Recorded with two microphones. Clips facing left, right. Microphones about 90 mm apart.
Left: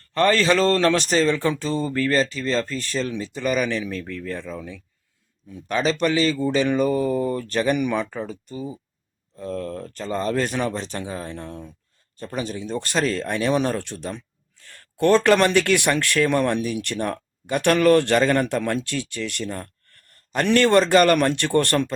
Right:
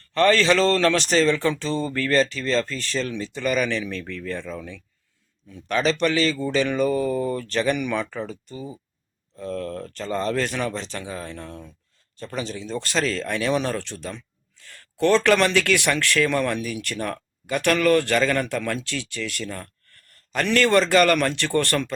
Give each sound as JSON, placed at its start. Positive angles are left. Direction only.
{"t": 0.1, "sound": "speech", "side_deg": 15}